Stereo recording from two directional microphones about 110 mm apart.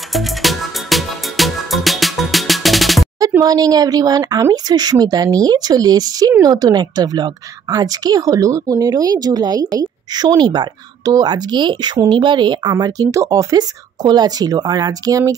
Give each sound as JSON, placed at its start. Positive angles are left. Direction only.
{"t": 0.1, "sound": "music", "side_deg": 0}
{"t": 3.4, "sound": "a woman's voice", "side_deg": -35}